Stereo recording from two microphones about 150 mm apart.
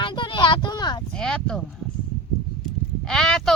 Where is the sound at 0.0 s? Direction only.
30° left (ahead or behind).